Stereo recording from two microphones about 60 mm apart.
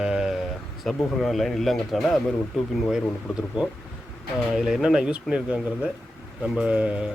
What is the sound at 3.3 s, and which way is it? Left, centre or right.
Speech, centre.